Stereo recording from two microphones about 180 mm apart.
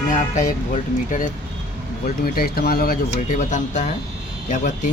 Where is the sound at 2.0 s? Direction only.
55° left (ahead or behind).